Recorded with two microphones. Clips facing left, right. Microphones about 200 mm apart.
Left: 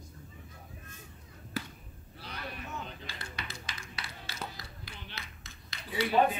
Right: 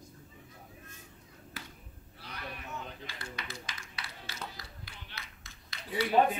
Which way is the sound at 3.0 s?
30° left (ahead or behind).